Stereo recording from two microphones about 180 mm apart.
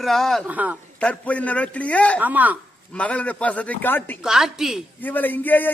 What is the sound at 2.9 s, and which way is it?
A man's voice, 5° left (ahead or behind).